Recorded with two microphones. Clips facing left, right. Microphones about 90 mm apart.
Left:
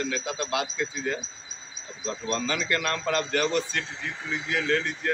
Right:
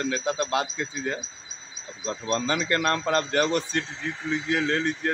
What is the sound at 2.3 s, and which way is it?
A man's voice, 35° right (ahead or behind).